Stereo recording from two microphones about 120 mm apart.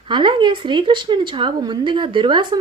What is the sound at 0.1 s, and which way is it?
A woman's voice, 40° right (ahead or behind).